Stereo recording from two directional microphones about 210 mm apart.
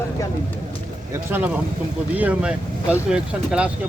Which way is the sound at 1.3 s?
10° right (ahead or behind).